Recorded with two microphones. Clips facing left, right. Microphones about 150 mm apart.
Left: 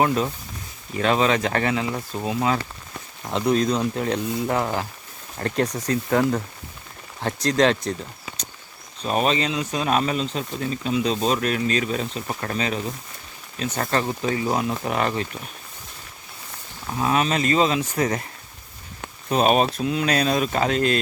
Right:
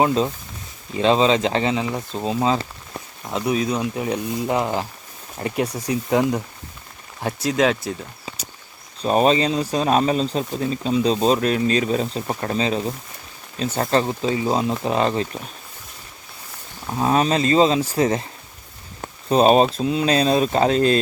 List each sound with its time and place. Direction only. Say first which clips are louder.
0.0 s speech: right 2 dB; 25° right (ahead or behind)
3.2 s speech: left 1 dB; 5° right (ahead or behind)
9.0 s speech: right 5 dB; 35° right (ahead or behind)
17.0 s speech: right 3 dB; 35° right (ahead or behind)